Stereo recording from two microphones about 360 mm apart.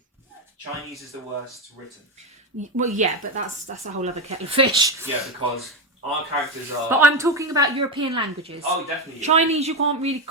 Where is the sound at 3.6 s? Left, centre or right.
Centre.